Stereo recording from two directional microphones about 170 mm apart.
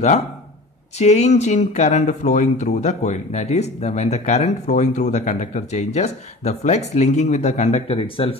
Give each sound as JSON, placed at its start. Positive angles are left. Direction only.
{"t": 0.9, "sound": "speech", "side_deg": 40}